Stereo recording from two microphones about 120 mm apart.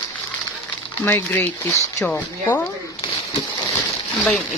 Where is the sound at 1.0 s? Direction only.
15° left (ahead or behind).